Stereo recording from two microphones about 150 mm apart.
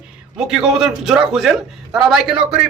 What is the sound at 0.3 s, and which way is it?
A man's voice, 5° right (ahead or behind).